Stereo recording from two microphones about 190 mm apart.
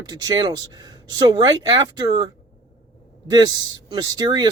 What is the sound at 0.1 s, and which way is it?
Speech, 20° right (ahead or behind).